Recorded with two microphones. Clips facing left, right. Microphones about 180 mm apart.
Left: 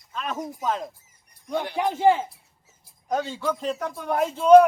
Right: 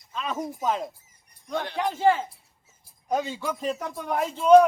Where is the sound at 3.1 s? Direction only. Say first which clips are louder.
Left 1 dB; 10° right (ahead or behind).